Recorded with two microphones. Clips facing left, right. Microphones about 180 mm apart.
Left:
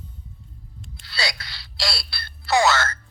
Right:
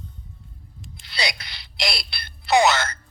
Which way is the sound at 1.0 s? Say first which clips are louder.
Right 1 dB; 20° right (ahead or behind).